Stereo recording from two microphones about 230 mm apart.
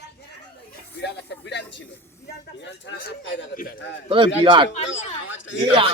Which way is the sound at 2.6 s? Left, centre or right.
Left.